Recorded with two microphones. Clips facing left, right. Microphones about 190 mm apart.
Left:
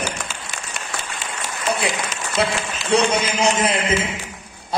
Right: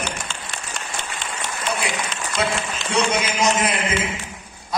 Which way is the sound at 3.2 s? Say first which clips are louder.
Left 1 dB; 30° left (ahead or behind).